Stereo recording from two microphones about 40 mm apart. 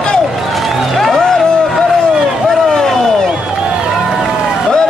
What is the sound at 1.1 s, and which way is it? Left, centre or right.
Music, centre.